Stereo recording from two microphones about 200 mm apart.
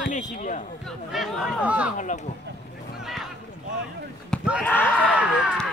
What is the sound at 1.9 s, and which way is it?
Speech, 40° left (ahead or behind).